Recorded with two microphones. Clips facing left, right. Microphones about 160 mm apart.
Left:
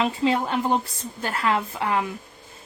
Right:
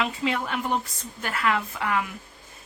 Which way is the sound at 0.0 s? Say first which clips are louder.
Left 5 dB; 30° left (ahead or behind).